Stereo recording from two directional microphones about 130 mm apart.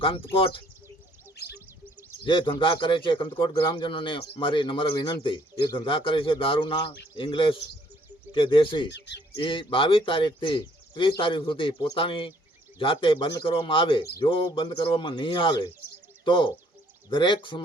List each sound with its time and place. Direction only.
0.0 s speech: 45° left (ahead or behind)
1.5 s bird: 15° right (ahead or behind)
2.2 s speech: 40° left (ahead or behind)